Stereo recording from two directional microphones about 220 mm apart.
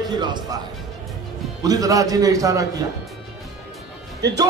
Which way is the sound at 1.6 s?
15° right (ahead or behind).